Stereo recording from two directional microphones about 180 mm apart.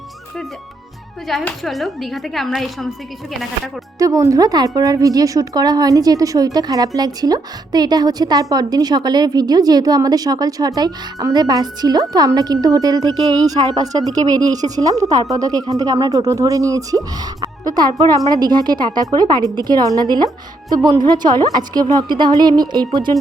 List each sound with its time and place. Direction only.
1.3 s a woman's voice: centre (ahead or behind)
3.9 s a woman's voice: 20° right (ahead or behind)